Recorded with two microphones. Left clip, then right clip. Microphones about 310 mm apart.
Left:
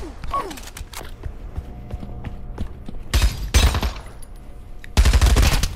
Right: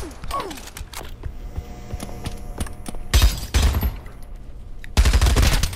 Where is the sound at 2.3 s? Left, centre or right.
Right.